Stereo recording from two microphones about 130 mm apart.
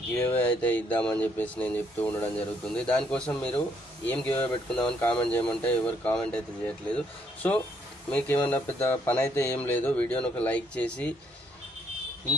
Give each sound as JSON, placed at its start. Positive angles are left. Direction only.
{"t": 0.2, "sound": "speech", "side_deg": 15}
{"t": 8.1, "sound": "speech", "side_deg": 15}